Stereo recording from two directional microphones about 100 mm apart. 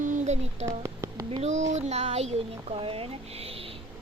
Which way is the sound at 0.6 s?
30° right (ahead or behind).